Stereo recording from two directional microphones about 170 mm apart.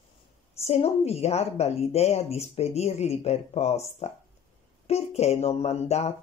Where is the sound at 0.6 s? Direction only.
40° left (ahead or behind).